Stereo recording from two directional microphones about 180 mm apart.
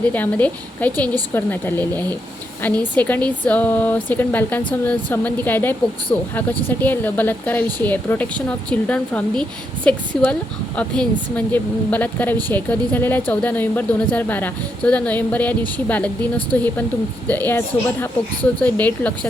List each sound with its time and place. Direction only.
0.0 s a woman's voice: 10° left (ahead or behind)
18.6 s a woman's voice: 10° left (ahead or behind)